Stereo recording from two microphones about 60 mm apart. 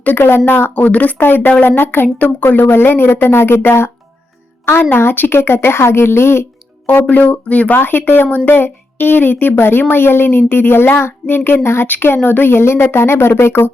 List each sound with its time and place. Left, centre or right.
0.0 s speech: left
6.8 s speech: left
7.8 s speech: left